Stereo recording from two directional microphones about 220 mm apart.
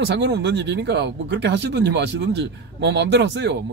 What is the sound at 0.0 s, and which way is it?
Speech, 50° right (ahead or behind).